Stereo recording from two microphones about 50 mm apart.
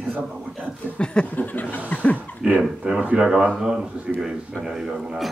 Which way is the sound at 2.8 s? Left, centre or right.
Right.